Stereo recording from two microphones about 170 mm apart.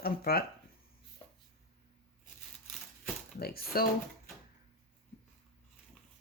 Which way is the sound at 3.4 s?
60° left (ahead or behind).